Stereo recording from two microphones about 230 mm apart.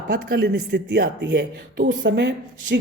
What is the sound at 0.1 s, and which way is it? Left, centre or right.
Speech, right.